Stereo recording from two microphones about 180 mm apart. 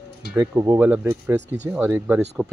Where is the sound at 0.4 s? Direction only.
15° right (ahead or behind).